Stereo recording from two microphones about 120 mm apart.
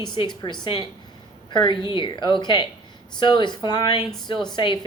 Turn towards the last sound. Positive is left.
turn(degrees=40)  # may be behind; listen again after turning